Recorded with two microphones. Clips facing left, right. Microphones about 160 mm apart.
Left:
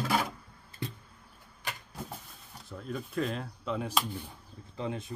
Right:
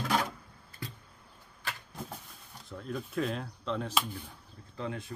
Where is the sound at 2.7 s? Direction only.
Centre (ahead or behind).